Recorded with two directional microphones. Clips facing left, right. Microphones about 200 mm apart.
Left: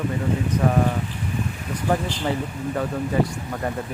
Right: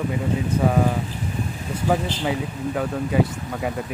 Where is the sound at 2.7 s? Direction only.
5° right (ahead or behind).